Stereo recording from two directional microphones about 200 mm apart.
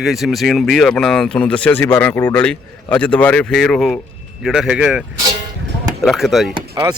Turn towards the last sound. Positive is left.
turn(degrees=-25)  # may be behind; listen again after turning